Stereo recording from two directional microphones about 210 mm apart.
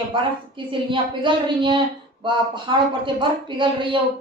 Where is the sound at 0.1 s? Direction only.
25° right (ahead or behind).